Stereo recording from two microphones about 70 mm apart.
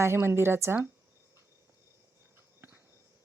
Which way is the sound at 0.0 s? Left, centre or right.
Right.